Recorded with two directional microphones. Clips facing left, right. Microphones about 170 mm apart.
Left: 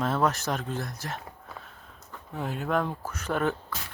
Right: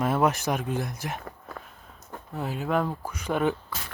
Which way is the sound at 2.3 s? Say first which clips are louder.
Right 1 dB; 5° right (ahead or behind).